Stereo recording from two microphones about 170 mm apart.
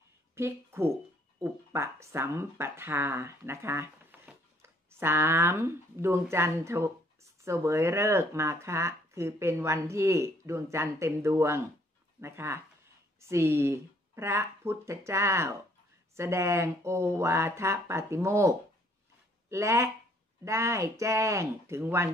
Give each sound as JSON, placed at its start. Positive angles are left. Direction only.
{"t": 0.4, "sound": "a woman's voice", "side_deg": -15}
{"t": 19.5, "sound": "speech", "side_deg": -15}